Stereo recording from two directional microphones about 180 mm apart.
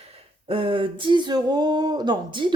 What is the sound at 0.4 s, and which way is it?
Speech, 30° right (ahead or behind).